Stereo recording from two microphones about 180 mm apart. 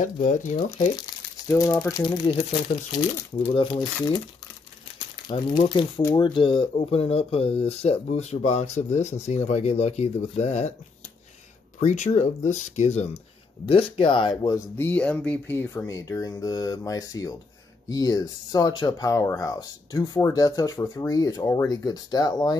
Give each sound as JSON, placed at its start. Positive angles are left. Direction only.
{"t": 0.0, "sound": "speech", "side_deg": 45}
{"t": 0.9, "sound": "speech", "side_deg": 20}
{"t": 5.6, "sound": "speech", "side_deg": 30}
{"t": 11.8, "sound": "speech", "side_deg": 40}
{"t": 14.8, "sound": "speech", "side_deg": 10}